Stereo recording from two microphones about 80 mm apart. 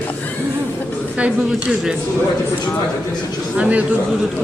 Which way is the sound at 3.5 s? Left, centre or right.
Centre.